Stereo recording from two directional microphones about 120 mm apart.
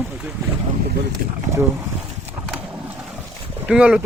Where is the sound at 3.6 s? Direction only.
5° right (ahead or behind).